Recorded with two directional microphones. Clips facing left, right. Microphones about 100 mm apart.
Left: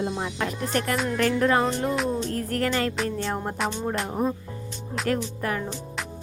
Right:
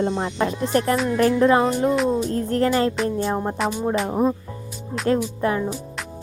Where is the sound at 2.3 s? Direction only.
30° right (ahead or behind).